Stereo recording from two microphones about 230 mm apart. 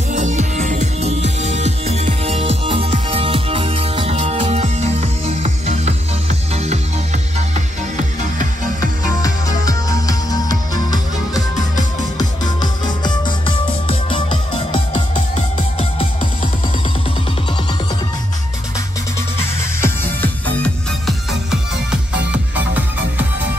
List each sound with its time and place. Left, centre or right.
0.1 s music: right
9.2 s music: centre
19.3 s music: centre